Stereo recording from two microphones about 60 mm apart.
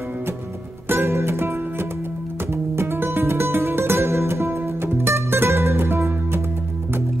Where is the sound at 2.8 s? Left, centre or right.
Right.